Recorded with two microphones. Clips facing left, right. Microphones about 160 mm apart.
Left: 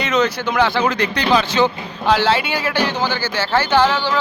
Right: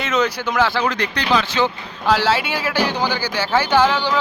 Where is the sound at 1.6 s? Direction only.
25° left (ahead or behind).